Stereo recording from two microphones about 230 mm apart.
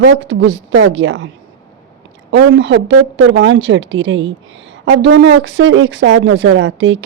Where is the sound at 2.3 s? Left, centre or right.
Right.